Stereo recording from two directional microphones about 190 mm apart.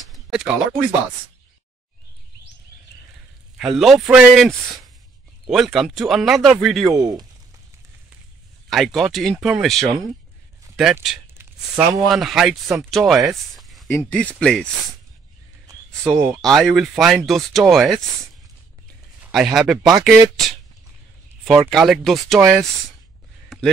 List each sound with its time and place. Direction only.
0.1 s a sound: 5° right (ahead or behind)
3.5 s speech: 5° right (ahead or behind)
6.9 s speech: 20° right (ahead or behind)
8.6 s speech: centre (ahead or behind)
15.9 s speech: centre (ahead or behind)
19.2 s speech: centre (ahead or behind)
23.5 s a sound: centre (ahead or behind)